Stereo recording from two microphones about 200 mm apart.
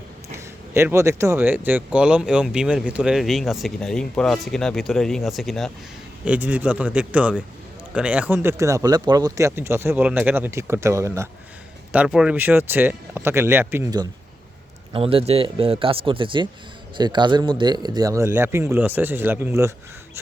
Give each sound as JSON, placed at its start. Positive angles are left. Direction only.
{"t": 0.3, "sound": "speech", "side_deg": -15}
{"t": 11.9, "sound": "speech", "side_deg": -5}
{"t": 14.9, "sound": "a man's voice", "side_deg": -30}